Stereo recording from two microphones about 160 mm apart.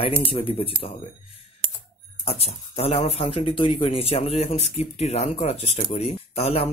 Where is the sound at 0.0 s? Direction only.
35° left (ahead or behind).